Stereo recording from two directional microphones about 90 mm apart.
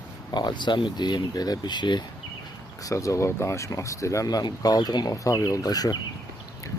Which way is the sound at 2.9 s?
35° left (ahead or behind).